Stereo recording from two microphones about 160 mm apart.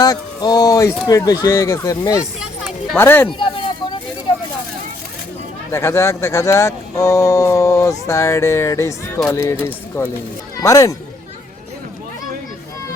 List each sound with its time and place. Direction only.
0.0 s speech: 25° left (ahead or behind)
3.2 s a sound: 30° left (ahead or behind)
5.7 s speech: 15° left (ahead or behind)